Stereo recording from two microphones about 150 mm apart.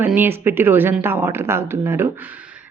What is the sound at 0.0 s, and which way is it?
A woman's voice, 15° right (ahead or behind).